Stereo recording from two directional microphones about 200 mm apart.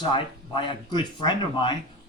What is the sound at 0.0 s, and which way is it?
A man's voice, 25° left (ahead or behind).